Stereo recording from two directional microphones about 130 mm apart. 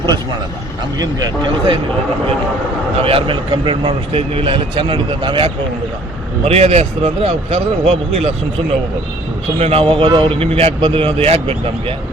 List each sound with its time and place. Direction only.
0.9 s speech: 35° right (ahead or behind)
3.0 s a man's voice: 45° right (ahead or behind)
6.4 s a man's voice: 55° right (ahead or behind)
9.6 s a man's voice: 50° right (ahead or behind)